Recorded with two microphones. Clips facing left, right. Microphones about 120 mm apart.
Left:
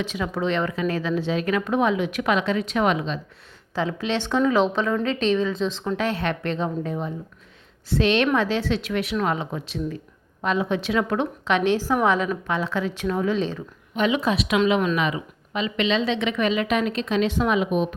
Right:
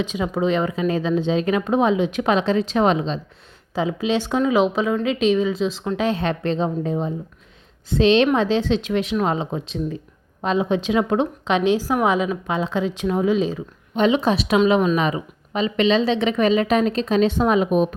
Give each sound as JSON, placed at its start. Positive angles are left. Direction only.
{"t": 0.0, "sound": "speech", "side_deg": -15}
{"t": 3.8, "sound": "a woman's voice", "side_deg": -15}
{"t": 6.0, "sound": "a woman's voice", "side_deg": -20}
{"t": 13.9, "sound": "a woman's voice", "side_deg": -25}